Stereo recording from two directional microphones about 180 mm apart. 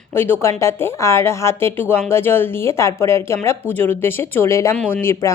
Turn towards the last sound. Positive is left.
turn(degrees=15)  # may be behind; listen again after turning